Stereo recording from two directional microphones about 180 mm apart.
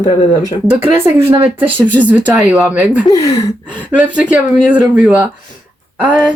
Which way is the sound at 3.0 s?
20° left (ahead or behind).